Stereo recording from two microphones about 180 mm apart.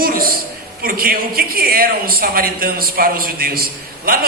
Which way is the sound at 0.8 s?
55° right (ahead or behind).